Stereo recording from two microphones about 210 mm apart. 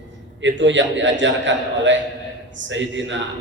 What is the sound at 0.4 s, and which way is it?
A man's voice, 60° right (ahead or behind).